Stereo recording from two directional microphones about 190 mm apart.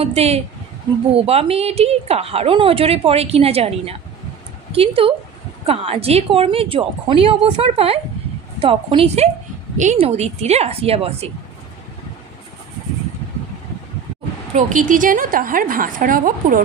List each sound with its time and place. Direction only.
0.0 s a woman's voice: 35° right (ahead or behind)
14.5 s a woman's voice: 45° right (ahead or behind)